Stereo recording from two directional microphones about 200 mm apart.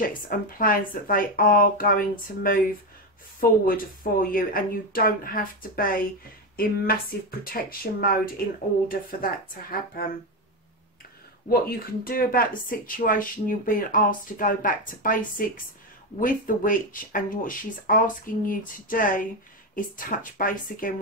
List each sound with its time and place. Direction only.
0.3 s speech: 45° left (ahead or behind)
11.4 s speech: 50° left (ahead or behind)